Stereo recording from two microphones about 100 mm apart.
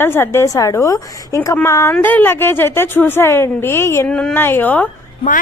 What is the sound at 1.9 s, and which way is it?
A woman's voice, 20° left (ahead or behind).